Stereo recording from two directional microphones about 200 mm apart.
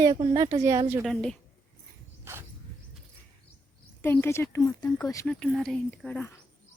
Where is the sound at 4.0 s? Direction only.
10° left (ahead or behind).